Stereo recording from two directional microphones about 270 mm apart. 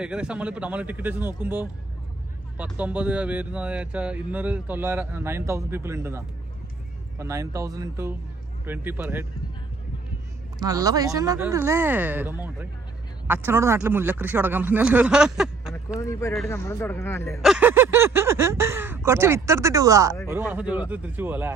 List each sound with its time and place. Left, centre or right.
0.0 s speech: centre
10.6 s speech: centre
16.0 s speech: centre
17.4 s speech: centre